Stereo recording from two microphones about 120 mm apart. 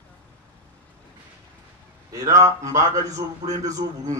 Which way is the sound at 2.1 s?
30° right (ahead or behind).